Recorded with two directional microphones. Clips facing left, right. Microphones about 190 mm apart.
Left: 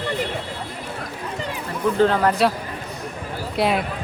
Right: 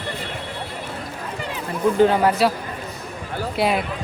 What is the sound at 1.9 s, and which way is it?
Speech, 10° right (ahead or behind).